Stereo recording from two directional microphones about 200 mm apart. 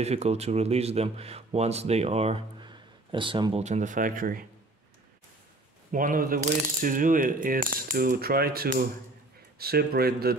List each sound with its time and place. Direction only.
0.0 s speech: 30° right (ahead or behind)
3.6 s speech: 35° right (ahead or behind)
5.9 s speech: 45° right (ahead or behind)